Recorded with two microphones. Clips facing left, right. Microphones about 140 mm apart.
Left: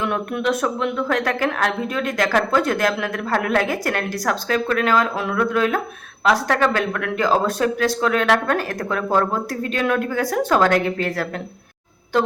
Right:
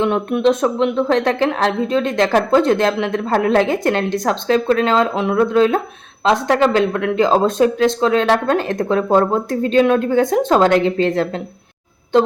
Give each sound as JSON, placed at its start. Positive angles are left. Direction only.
{"t": 0.0, "sound": "speech", "side_deg": -25}